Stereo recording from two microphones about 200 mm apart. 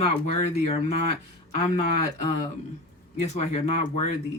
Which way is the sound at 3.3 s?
30° left (ahead or behind).